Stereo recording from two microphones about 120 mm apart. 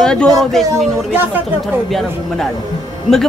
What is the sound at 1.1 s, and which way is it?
Speech, 15° right (ahead or behind).